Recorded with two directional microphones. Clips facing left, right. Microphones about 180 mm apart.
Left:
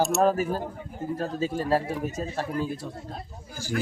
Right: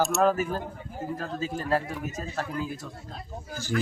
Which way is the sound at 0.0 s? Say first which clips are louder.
Left 1 dB; centre (ahead or behind).